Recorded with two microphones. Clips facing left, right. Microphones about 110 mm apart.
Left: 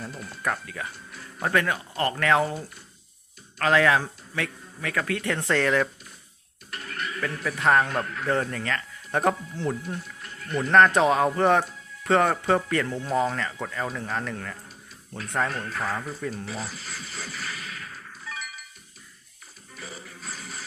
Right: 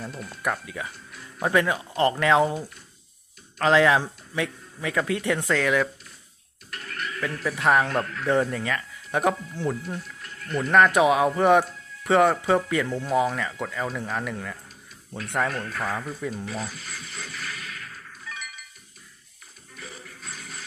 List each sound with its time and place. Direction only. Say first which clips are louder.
0.1 s speech: right 1 dB; centre (ahead or behind)
0.4 s speech: right 1 dB; 10° right (ahead or behind)
5.5 s speech: left 1 dB; 5° right (ahead or behind)
6.7 s a sound: even; 5° left (ahead or behind)
7.5 s speech: even; 15° right (ahead or behind)
7.9 s speech: right 2 dB; 5° left (ahead or behind)
8.3 s speech: right 3 dB; 10° right (ahead or behind)
18.3 s a sound: left 2 dB; 10° left (ahead or behind)
19.7 s music: left 1 dB; centre (ahead or behind)